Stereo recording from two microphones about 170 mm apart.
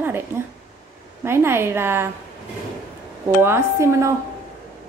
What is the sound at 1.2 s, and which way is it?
Speech, 15° right (ahead or behind).